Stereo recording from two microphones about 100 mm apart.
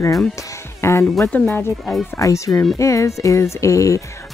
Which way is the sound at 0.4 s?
30° left (ahead or behind).